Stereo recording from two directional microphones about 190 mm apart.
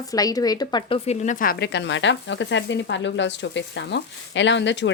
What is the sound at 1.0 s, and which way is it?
Speech, 40° left (ahead or behind).